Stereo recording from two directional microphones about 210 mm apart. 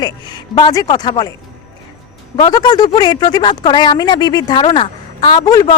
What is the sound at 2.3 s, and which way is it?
Speech, 20° left (ahead or behind).